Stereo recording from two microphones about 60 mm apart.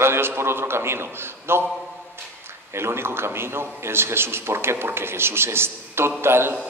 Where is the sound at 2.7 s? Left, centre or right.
Right.